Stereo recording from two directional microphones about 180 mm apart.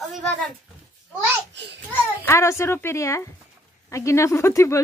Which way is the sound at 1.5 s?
75° right (ahead or behind).